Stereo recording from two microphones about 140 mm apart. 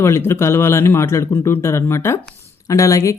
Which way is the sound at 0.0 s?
20° left (ahead or behind).